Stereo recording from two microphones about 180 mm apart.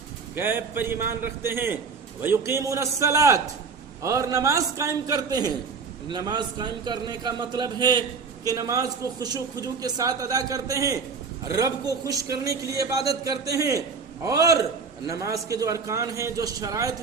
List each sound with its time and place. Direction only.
0.3 s a man's voice: 10° right (ahead or behind)